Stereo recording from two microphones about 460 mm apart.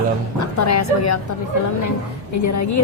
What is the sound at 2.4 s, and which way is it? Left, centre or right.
Speech, left.